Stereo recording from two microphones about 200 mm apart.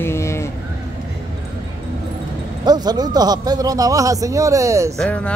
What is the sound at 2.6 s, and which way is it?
Speech, 20° right (ahead or behind).